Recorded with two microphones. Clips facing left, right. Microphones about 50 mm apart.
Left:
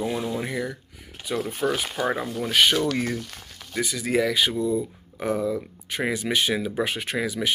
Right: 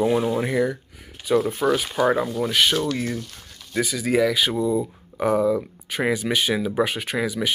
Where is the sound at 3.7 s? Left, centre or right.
Centre.